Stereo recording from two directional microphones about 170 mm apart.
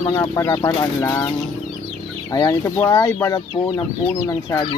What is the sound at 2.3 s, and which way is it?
Speech, 20° left (ahead or behind).